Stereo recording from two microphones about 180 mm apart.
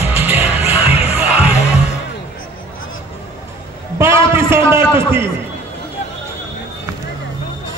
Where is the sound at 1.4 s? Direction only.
35° left (ahead or behind).